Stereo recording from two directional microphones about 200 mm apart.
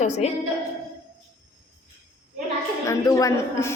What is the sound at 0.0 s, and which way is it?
Speech, 35° left (ahead or behind).